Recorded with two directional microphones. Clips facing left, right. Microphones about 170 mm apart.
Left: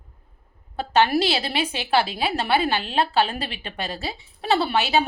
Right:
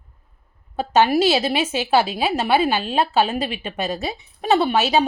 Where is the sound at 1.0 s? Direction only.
20° right (ahead or behind).